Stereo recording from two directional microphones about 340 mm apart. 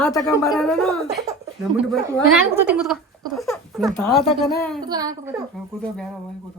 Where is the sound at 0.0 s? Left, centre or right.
Centre.